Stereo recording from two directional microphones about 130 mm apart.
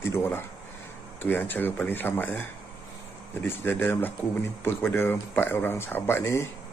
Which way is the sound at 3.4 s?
15° left (ahead or behind).